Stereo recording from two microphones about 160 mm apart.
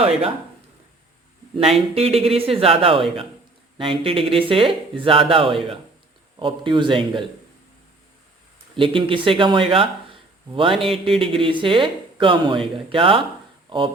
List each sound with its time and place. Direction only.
0.0 s speech: 35° right (ahead or behind)
1.5 s speech: 40° right (ahead or behind)
8.7 s speech: 35° right (ahead or behind)